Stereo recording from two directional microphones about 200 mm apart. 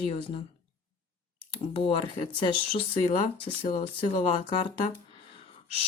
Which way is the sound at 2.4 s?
25° left (ahead or behind).